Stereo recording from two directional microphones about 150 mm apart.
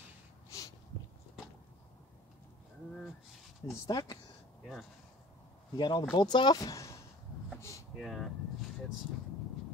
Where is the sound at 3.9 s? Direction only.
30° left (ahead or behind).